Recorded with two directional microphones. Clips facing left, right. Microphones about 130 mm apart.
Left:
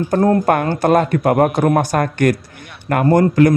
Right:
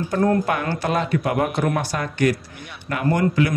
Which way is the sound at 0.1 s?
40° left (ahead or behind).